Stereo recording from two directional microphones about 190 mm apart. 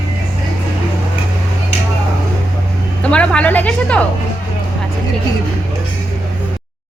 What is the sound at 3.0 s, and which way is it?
A woman's voice, 5° left (ahead or behind).